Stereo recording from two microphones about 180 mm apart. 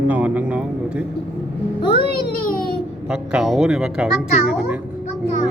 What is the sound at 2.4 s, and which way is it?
Babbling, 55° left (ahead or behind).